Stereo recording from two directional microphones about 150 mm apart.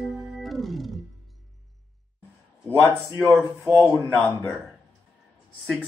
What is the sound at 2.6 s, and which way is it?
Speech, 20° left (ahead or behind).